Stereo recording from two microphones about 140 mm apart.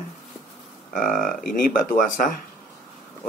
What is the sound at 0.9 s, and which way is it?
Speech, 70° left (ahead or behind).